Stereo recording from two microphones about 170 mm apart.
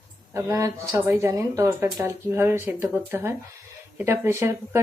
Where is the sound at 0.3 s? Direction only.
15° right (ahead or behind).